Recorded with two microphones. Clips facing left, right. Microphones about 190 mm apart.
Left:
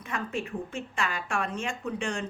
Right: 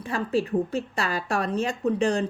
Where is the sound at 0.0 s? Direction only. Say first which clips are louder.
Right 8 dB; 35° right (ahead or behind).